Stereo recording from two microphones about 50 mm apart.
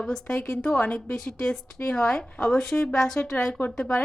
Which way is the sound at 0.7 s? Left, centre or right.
Left.